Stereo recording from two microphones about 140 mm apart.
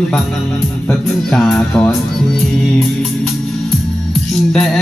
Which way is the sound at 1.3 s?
5° left (ahead or behind).